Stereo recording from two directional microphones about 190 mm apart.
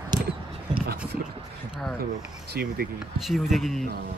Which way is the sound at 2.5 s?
55° right (ahead or behind).